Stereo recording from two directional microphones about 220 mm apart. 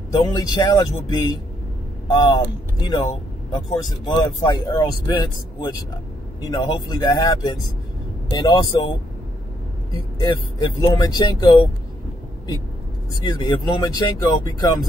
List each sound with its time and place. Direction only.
0.2 s speech: 20° left (ahead or behind)
10.2 s speech: 15° left (ahead or behind)
13.2 s speech: 20° left (ahead or behind)